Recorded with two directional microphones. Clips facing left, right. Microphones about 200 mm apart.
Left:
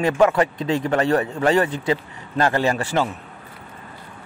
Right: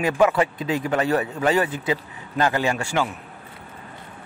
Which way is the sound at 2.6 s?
35° left (ahead or behind).